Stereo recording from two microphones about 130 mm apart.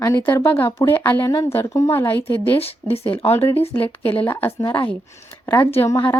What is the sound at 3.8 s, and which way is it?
Speech, 45° left (ahead or behind).